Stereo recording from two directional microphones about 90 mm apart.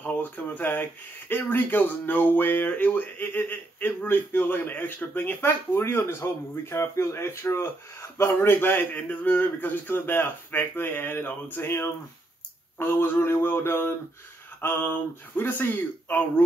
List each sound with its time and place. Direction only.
0.0 s speech: 20° left (ahead or behind)